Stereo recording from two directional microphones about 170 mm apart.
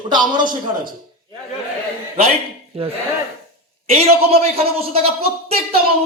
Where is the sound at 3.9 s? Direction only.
35° right (ahead or behind).